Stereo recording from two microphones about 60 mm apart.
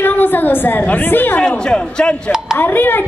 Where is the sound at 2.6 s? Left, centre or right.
Left.